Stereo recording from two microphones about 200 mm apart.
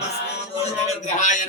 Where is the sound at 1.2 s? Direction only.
40° left (ahead or behind).